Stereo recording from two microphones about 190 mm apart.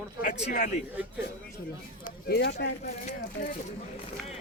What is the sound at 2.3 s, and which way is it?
Speech, 60° left (ahead or behind).